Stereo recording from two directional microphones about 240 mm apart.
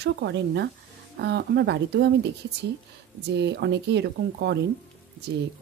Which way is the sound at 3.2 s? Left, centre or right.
Right.